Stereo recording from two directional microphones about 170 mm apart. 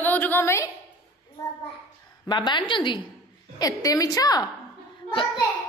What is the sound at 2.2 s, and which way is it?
A child's voice, 25° left (ahead or behind).